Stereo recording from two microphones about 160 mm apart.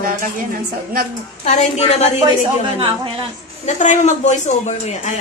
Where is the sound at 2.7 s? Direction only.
35° right (ahead or behind).